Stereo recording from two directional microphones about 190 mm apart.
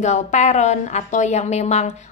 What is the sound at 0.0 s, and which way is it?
A woman's voice, 40° left (ahead or behind).